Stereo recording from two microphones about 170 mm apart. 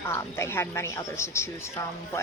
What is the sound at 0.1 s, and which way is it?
Speech, 15° left (ahead or behind).